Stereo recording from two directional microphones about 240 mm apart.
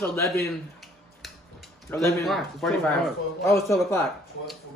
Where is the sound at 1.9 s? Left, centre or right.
Centre.